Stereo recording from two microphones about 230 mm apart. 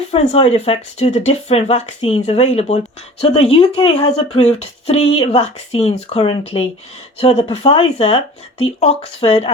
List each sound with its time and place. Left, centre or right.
0.1 s speech: left